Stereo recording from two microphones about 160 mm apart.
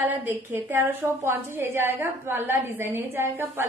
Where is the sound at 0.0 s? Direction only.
10° right (ahead or behind).